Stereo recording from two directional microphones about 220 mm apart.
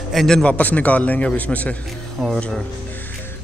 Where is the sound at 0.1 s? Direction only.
Centre (ahead or behind).